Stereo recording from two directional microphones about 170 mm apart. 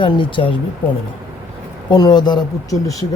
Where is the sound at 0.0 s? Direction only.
30° left (ahead or behind).